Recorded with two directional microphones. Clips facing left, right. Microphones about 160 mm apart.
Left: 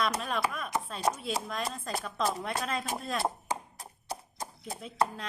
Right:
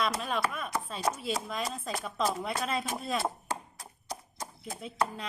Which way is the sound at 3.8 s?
30° left (ahead or behind).